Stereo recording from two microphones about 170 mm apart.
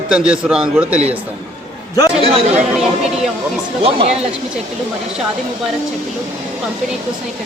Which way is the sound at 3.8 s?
40° right (ahead or behind).